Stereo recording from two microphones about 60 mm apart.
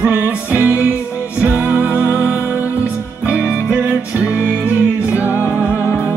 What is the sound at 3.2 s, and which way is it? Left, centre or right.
Music, right.